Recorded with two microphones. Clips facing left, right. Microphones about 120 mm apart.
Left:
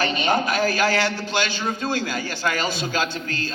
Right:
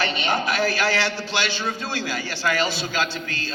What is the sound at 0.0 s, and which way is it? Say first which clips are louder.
A man's voice: left 2 dB; 45° left (ahead or behind).